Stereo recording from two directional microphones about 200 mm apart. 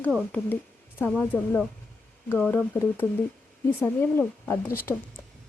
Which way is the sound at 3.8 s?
10° left (ahead or behind).